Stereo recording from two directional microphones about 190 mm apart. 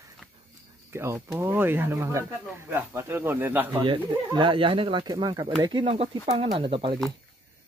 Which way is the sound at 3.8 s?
25° right (ahead or behind).